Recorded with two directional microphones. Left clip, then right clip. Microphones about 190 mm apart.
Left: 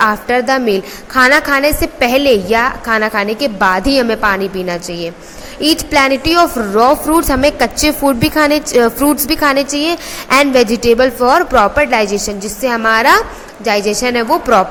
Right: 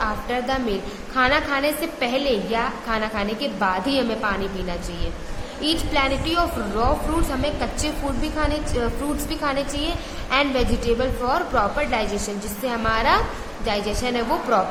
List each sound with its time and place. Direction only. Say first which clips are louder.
0.0 s a woman's voice: left 12 dB; 40° left (ahead or behind)
5.9 s a woman's voice: left 12 dB; 40° left (ahead or behind)